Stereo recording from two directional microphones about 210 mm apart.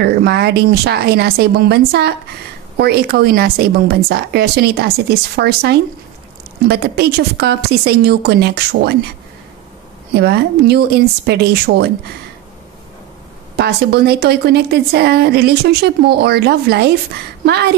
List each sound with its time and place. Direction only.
0.0 s a woman's voice: 50° right (ahead or behind)
10.1 s a woman's voice: 50° right (ahead or behind)
13.6 s a woman's voice: 50° right (ahead or behind)